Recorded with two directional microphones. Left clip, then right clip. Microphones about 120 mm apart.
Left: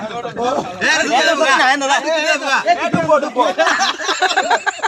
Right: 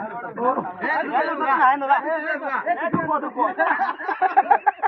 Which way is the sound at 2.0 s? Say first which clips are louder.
Left 8 dB; 40° left (ahead or behind).